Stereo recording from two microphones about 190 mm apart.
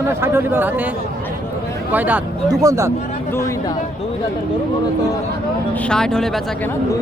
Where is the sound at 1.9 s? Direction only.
10° right (ahead or behind).